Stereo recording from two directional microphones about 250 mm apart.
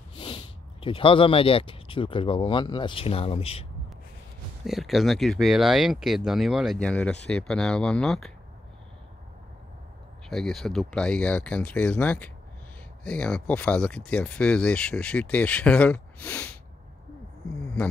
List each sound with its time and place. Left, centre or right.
0.2 s speech: centre
4.6 s speech: centre
10.3 s speech: centre